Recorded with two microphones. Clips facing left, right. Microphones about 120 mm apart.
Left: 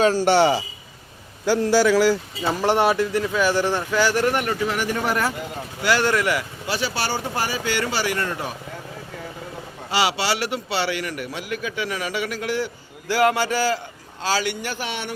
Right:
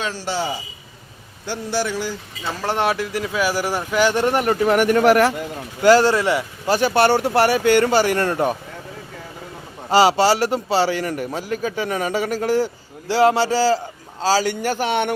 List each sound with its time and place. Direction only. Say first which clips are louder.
0.0 s a man's voice: left 9 dB; 45° left (ahead or behind)
0.3 s a man's voice: left 5 dB; 75° left (ahead or behind)
1.5 s speech: left 6 dB; 90° left
2.6 s speech: left 3 dB; 15° left (ahead or behind)
2.8 s speech: left 2 dB; centre (ahead or behind); by 4.5 s 30° right (ahead or behind)
4.6 s speech: right 9 dB; 55° right (ahead or behind); by 5.3 s 85° right
5.8 s speech: right 7 dB; 35° right (ahead or behind)
6.7 s speech: right 10 dB; 50° right (ahead or behind)
9.9 s a man's voice: right 8 dB; 40° right (ahead or behind)